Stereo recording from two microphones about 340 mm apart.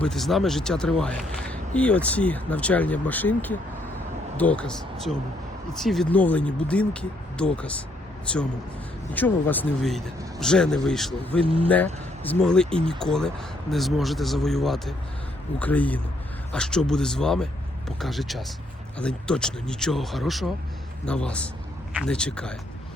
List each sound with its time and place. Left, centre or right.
0.0 s speech: centre
11.4 s speech: centre
12.2 s speech: centre